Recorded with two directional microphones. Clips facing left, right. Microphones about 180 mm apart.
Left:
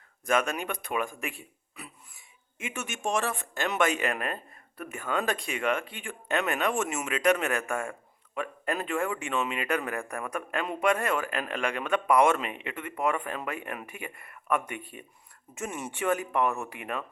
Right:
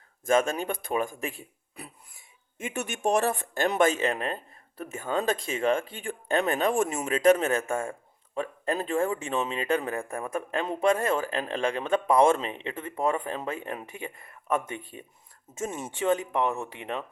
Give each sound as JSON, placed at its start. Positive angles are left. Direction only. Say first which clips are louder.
{"t": 0.3, "sound": "speech", "louder": "right 3 dB", "side_deg": -25}
{"t": 2.6, "sound": "speech", "louder": "right 4 dB", "side_deg": -35}